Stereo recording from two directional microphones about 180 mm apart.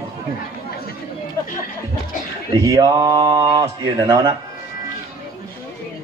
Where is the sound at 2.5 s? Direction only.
20° right (ahead or behind).